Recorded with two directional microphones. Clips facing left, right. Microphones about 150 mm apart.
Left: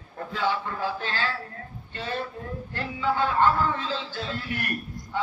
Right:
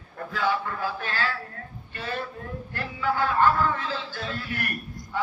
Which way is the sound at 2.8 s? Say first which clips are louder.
Left 1 dB; 20° left (ahead or behind).